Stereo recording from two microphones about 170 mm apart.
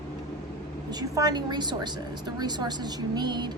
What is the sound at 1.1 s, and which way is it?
A woman's voice, 20° right (ahead or behind).